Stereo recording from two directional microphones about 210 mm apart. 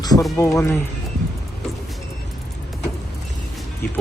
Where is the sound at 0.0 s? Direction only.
20° left (ahead or behind).